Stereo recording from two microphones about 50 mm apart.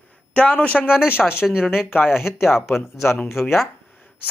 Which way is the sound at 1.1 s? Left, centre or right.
Left.